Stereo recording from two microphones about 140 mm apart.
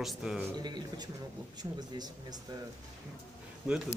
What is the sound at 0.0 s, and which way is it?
Speech, 5° right (ahead or behind).